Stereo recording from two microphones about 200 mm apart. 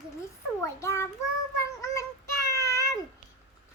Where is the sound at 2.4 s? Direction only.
15° left (ahead or behind).